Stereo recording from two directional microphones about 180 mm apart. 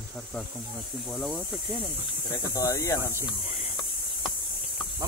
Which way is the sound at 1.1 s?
Centre (ahead or behind).